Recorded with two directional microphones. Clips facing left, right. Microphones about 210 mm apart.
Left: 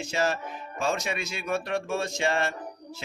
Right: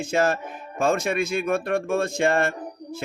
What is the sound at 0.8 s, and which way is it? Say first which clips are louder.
Speech: right 7 dB; 55° right (ahead or behind).